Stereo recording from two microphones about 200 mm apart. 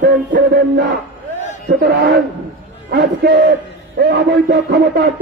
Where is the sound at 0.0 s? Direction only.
50° right (ahead or behind).